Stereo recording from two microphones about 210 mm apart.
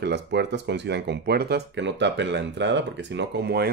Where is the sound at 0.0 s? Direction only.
55° right (ahead or behind).